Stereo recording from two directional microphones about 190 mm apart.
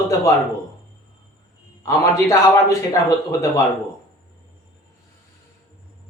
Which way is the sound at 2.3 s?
20° left (ahead or behind).